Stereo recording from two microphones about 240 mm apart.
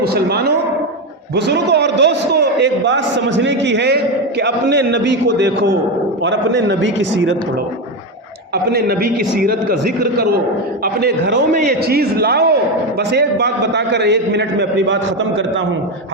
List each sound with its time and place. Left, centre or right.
0.0 s a man's voice: right
8.7 s a man's voice: right